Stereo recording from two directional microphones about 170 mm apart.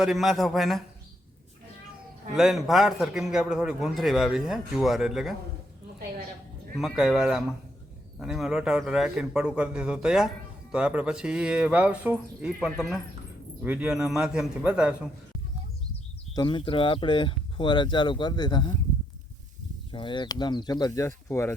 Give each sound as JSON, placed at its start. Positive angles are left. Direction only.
{"t": 0.0, "sound": "a man's voice", "side_deg": 0}
{"t": 2.3, "sound": "a man's voice", "side_deg": 0}
{"t": 6.7, "sound": "a man's voice", "side_deg": 0}
{"t": 13.6, "sound": "a man's voice", "side_deg": -5}
{"t": 16.3, "sound": "speech", "side_deg": 25}
{"t": 19.9, "sound": "speech", "side_deg": 30}